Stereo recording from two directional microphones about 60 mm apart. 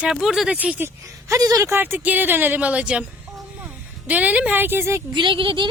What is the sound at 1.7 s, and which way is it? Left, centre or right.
Speech, right.